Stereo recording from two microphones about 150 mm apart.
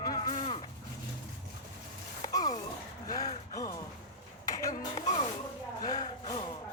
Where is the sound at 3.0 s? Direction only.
25° left (ahead or behind).